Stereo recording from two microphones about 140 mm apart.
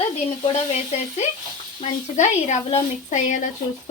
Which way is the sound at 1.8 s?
55° left (ahead or behind).